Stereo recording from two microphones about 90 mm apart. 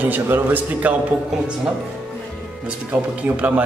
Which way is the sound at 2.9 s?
15° right (ahead or behind).